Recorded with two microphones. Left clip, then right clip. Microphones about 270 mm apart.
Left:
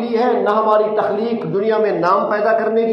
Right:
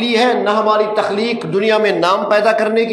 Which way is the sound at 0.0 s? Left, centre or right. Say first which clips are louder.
Right 2 dB; right.